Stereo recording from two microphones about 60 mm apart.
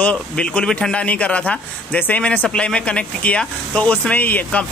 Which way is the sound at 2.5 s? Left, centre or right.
Centre.